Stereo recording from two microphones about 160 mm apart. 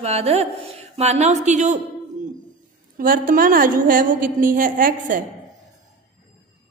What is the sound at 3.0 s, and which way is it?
A woman's voice, 60° right (ahead or behind).